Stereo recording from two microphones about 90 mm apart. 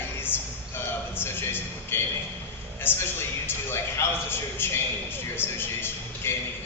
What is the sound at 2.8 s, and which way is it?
A man's voice, 25° left (ahead or behind).